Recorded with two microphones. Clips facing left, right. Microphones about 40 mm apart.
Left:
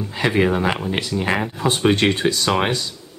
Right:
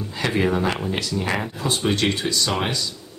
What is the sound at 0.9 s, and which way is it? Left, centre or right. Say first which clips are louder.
Speech: left 3 dB; left.